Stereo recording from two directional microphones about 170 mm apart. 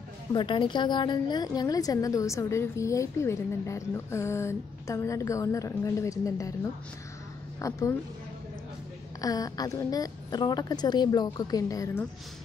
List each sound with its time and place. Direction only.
0.3 s a woman's voice: 30° left (ahead or behind)
7.6 s a woman's voice: 20° left (ahead or behind)
9.2 s a woman's voice: 20° left (ahead or behind)